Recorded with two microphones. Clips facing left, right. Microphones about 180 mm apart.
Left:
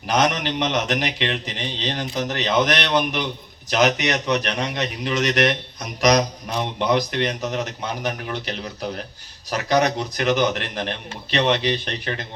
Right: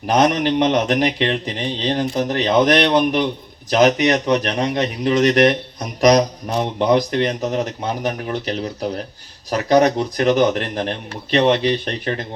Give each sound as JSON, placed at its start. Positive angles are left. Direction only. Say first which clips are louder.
{"t": 0.2, "sound": "speech", "louder": "right 6 dB", "side_deg": -45}